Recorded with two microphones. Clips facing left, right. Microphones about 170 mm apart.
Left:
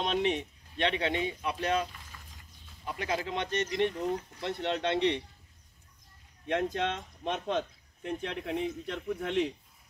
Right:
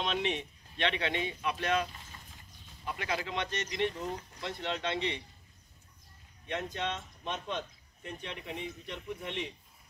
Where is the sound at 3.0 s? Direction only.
35° left (ahead or behind).